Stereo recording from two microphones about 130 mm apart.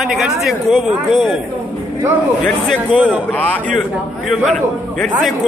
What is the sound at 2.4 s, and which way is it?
Speech, 5° left (ahead or behind).